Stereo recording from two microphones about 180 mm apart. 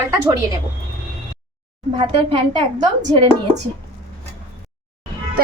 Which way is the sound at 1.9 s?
30° right (ahead or behind).